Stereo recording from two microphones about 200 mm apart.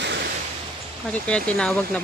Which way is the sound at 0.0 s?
60° right (ahead or behind).